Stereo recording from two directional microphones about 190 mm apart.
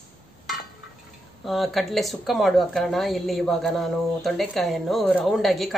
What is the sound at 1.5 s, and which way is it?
Speech, centre (ahead or behind).